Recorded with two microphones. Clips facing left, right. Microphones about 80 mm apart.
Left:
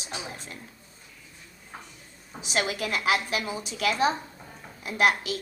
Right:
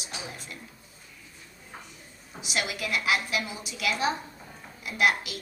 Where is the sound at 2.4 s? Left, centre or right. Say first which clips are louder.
Left 3 dB; left.